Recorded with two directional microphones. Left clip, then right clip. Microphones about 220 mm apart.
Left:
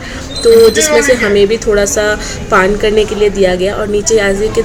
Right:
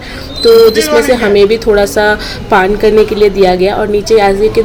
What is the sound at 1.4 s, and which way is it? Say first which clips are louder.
A woman's voice: right 2 dB; 15° right (ahead or behind).